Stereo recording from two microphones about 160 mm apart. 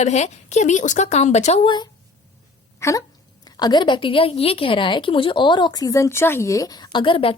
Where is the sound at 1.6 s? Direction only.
25° left (ahead or behind).